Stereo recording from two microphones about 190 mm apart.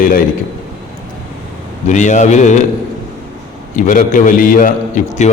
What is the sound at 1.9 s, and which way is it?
Speech, 40° left (ahead or behind).